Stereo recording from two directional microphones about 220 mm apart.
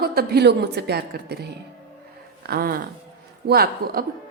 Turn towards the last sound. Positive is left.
turn(degrees=-45)  # may be behind; listen again after turning